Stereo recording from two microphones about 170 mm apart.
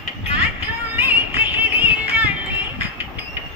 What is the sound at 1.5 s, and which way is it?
Music, 10° right (ahead or behind).